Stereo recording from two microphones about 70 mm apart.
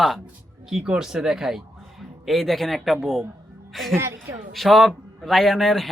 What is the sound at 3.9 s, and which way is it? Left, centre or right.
Speech, right.